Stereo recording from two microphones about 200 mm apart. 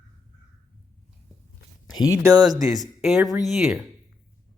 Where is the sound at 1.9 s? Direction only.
20° left (ahead or behind).